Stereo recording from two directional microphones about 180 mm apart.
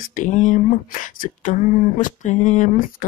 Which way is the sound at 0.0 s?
45° left (ahead or behind).